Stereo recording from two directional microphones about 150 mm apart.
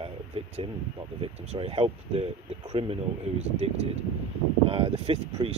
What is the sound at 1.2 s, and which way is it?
Speech, 40° right (ahead or behind).